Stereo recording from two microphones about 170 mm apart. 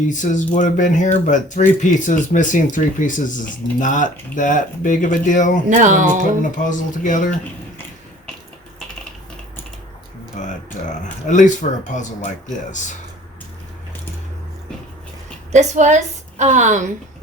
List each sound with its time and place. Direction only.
0.1 s speech: 45° left (ahead or behind)
5.6 s a woman's voice: 50° right (ahead or behind)
6.6 s speech: 50° left (ahead or behind)
10.3 s speech: 45° left (ahead or behind)
15.5 s a woman's voice: 45° right (ahead or behind)